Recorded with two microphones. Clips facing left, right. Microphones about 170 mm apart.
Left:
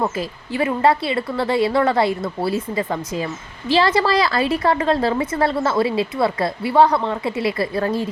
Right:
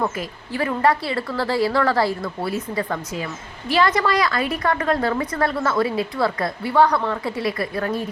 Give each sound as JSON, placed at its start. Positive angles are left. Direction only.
{"t": 0.0, "sound": "a woman's voice", "side_deg": 25}